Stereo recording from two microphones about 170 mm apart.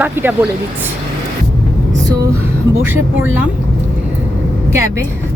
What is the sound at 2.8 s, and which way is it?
Speech, 10° right (ahead or behind).